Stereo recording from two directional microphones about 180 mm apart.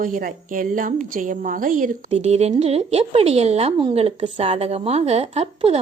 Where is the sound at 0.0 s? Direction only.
50° right (ahead or behind).